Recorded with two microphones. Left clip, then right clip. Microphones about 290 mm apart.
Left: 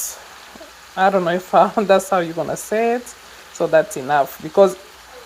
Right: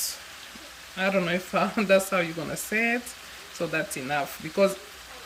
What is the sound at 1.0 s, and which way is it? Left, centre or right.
Speech, left.